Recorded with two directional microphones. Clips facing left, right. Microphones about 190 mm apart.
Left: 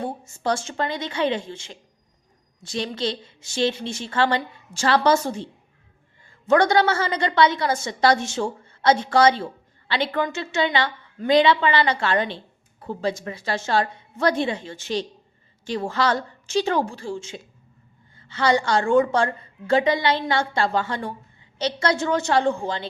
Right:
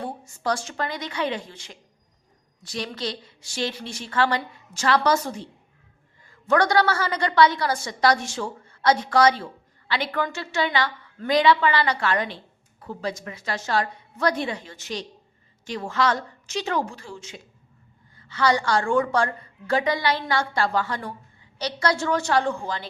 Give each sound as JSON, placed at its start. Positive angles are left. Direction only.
{"t": 0.0, "sound": "a woman's voice", "side_deg": 25}
{"t": 6.5, "sound": "a woman's voice", "side_deg": 25}